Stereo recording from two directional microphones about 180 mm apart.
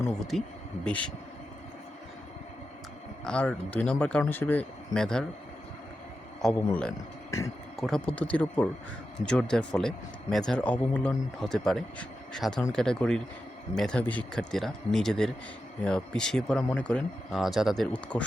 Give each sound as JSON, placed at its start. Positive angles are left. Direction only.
{"t": 0.1, "sound": "a man's voice", "side_deg": 0}
{"t": 3.2, "sound": "speech", "side_deg": 5}
{"t": 6.4, "sound": "a man's voice", "side_deg": 5}
{"t": 7.3, "sound": "speech", "side_deg": 15}
{"t": 7.8, "sound": "a man's voice", "side_deg": 0}